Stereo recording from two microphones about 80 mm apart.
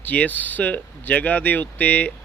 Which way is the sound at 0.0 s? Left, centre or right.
Centre.